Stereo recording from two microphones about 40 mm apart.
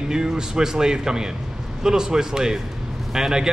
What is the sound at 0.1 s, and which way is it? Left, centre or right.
Speech, centre.